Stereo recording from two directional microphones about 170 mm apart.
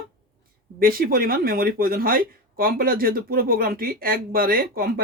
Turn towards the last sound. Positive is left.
turn(degrees=-60)  # may be behind; listen again after turning